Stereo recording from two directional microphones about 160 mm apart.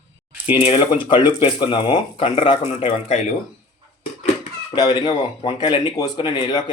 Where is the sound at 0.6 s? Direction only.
30° left (ahead or behind).